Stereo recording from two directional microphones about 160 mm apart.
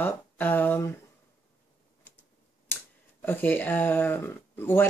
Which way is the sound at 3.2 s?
10° left (ahead or behind).